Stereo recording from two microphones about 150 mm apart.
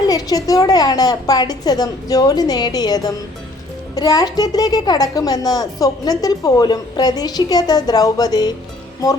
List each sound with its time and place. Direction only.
0.1 s a woman's voice: 25° left (ahead or behind)